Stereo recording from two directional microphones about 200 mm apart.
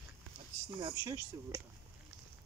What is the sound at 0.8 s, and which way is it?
Speech, 20° right (ahead or behind).